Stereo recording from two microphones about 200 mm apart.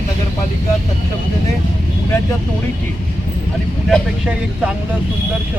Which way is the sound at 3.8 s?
5° right (ahead or behind).